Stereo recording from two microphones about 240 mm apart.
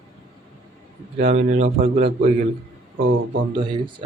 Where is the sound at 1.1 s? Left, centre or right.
Right.